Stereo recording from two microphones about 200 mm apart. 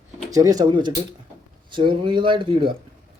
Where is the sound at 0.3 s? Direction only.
15° right (ahead or behind).